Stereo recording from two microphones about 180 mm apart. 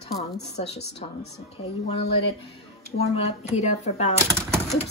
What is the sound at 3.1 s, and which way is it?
Speech, 35° left (ahead or behind).